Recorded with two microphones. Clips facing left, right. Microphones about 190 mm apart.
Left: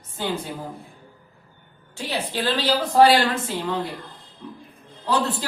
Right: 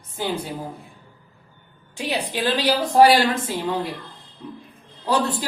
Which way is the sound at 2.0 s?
15° right (ahead or behind).